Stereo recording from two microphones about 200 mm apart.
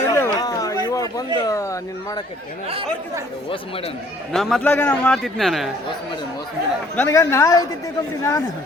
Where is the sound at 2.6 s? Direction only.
30° right (ahead or behind).